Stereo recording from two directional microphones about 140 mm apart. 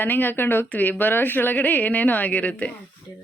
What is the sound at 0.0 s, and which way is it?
Speech, 15° left (ahead or behind).